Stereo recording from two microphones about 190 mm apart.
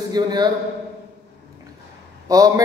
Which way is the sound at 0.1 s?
20° right (ahead or behind).